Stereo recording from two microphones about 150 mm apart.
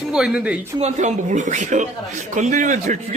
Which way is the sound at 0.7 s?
50° right (ahead or behind).